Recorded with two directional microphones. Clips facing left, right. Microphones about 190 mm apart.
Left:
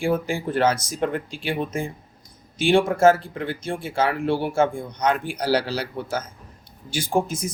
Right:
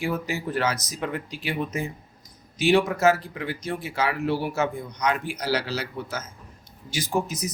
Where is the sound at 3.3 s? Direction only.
50° left (ahead or behind).